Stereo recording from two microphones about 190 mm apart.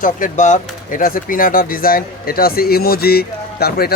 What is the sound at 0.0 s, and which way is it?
Speech, 40° left (ahead or behind).